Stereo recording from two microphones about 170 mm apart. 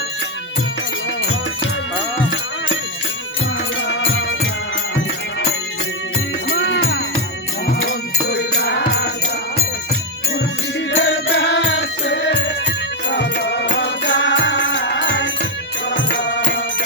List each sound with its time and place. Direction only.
4.9 s music: 80° left
8.3 s music: 85° left
10.9 s music: 90° left